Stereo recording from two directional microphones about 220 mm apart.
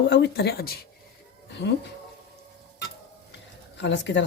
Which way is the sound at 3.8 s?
55° left (ahead or behind).